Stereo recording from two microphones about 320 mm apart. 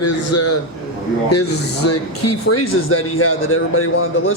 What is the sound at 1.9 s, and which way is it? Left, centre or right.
A man's voice, left.